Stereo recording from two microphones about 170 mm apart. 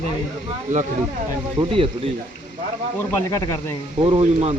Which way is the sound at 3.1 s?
15° left (ahead or behind).